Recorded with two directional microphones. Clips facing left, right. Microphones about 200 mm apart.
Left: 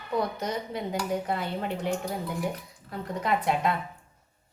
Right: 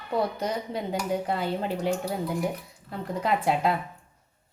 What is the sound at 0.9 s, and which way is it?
Speech, 30° right (ahead or behind).